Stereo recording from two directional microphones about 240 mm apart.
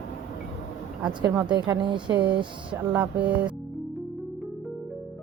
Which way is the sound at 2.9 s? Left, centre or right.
Centre.